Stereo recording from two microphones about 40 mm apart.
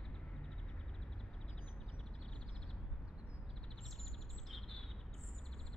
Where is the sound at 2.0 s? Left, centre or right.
Left.